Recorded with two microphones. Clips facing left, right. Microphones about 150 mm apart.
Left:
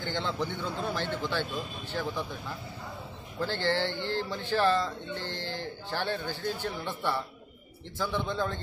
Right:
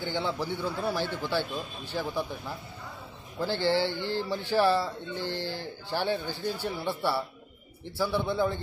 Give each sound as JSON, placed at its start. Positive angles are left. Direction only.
{"t": 0.0, "sound": "speech", "side_deg": -10}
{"t": 3.3, "sound": "speech", "side_deg": -15}